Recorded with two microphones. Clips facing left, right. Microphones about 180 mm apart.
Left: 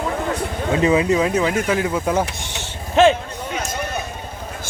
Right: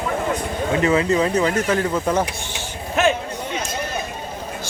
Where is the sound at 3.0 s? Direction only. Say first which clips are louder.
Left 5 dB; 30° left (ahead or behind).